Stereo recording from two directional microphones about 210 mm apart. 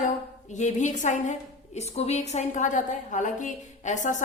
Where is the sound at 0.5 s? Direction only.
35° left (ahead or behind).